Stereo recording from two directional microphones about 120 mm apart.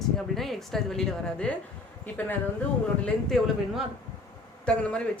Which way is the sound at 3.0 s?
Centre (ahead or behind).